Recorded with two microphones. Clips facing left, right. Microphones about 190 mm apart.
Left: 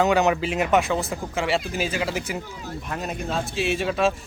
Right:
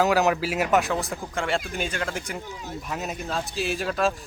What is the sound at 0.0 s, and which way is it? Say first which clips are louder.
Speech: left 1 dB; centre (ahead or behind).